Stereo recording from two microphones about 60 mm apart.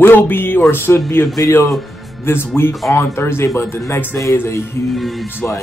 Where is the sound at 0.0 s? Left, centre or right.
Left.